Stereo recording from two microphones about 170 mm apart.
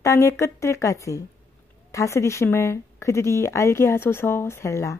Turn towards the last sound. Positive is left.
turn(degrees=15)  # may be behind; listen again after turning